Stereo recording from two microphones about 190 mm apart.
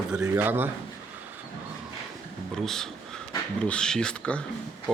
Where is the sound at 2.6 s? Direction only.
Centre (ahead or behind).